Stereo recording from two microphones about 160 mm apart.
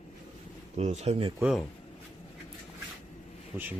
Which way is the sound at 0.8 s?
45° right (ahead or behind).